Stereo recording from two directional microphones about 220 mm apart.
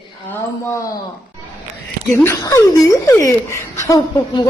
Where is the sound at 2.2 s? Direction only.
10° left (ahead or behind).